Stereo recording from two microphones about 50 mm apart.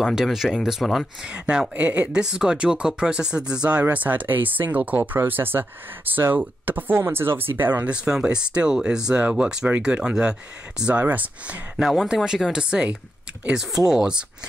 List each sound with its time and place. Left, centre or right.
0.1 s speech: centre
0.8 s speech: centre
1.2 s speech: centre
3.9 s speech: right
7.8 s speech: centre
11.0 s speech: right
11.7 s speech: centre